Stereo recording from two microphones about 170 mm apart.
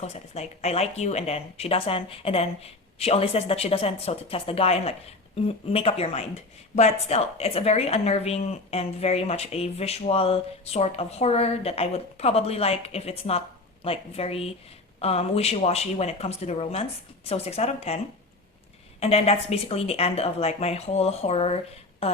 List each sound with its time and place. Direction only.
0.0 s a woman's voice: 40° left (ahead or behind)